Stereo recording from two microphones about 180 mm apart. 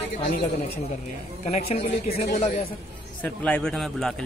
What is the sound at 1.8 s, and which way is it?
Speech, 55° left (ahead or behind).